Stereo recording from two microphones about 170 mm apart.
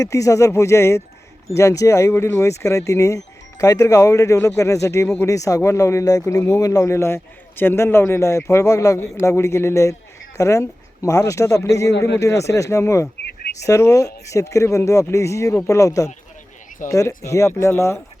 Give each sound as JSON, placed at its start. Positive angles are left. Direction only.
{"t": 0.0, "sound": "speech", "side_deg": 20}
{"t": 11.9, "sound": "speech", "side_deg": 80}
{"t": 12.2, "sound": "speech", "side_deg": 15}